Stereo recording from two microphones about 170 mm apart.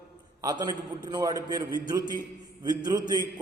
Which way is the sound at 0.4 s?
20° right (ahead or behind).